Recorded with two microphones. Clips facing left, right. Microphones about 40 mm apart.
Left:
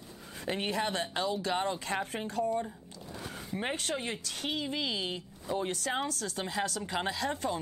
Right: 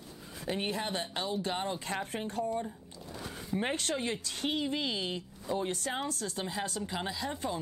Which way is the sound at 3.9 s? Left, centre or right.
Centre.